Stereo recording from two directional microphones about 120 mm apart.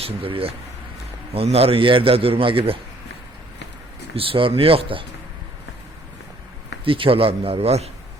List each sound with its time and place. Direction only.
0.0 s a man's voice: 50° right (ahead or behind)
4.1 s a man's voice: 50° right (ahead or behind)
6.8 s a man's voice: 50° right (ahead or behind)